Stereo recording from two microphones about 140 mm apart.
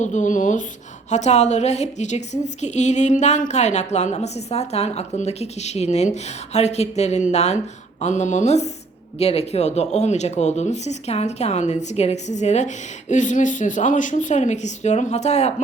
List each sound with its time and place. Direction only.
0.0 s speech: 60° left (ahead or behind)
1.1 s a woman's voice: 55° left (ahead or behind)